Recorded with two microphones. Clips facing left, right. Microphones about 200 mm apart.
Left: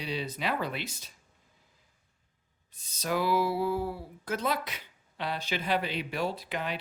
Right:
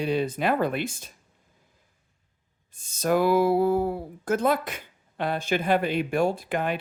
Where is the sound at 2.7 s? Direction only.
50° right (ahead or behind).